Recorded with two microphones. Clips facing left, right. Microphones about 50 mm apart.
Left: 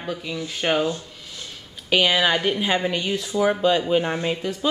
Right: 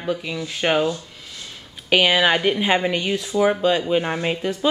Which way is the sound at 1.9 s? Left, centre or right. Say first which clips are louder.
Right 2 dB; centre.